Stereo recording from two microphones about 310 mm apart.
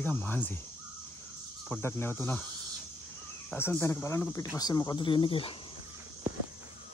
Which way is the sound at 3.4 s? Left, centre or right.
Centre.